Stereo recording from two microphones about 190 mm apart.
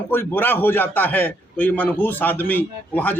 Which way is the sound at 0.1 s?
10° left (ahead or behind).